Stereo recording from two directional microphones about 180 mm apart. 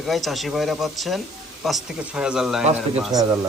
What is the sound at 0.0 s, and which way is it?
A man's voice, centre (ahead or behind).